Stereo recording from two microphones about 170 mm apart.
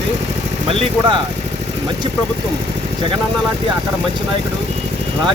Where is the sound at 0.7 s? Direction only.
30° right (ahead or behind).